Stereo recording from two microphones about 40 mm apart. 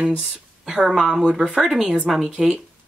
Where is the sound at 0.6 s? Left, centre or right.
Centre.